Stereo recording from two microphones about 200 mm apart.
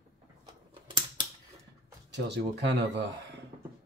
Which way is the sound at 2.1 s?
60° right (ahead or behind).